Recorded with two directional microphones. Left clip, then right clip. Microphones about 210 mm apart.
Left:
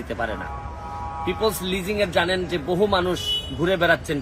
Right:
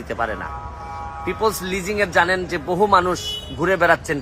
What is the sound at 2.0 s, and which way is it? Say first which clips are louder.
Speech: right 4 dB; 10° right (ahead or behind).